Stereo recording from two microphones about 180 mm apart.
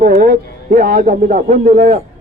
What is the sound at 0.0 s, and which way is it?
A man's voice, 55° right (ahead or behind).